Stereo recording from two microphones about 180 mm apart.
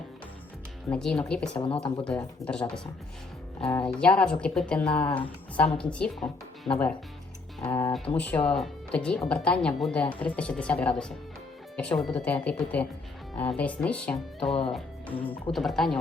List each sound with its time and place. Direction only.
0.9 s speech: 5° left (ahead or behind)
1.6 s speech: 30° left (ahead or behind)
2.0 s speech: 5° left (ahead or behind)